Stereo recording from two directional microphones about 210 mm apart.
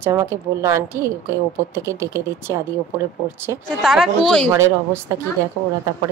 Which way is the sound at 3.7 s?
Centre (ahead or behind).